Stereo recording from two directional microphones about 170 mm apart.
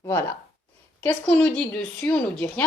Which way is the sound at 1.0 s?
5° left (ahead or behind).